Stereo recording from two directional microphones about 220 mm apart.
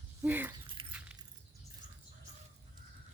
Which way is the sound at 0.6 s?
25° right (ahead or behind).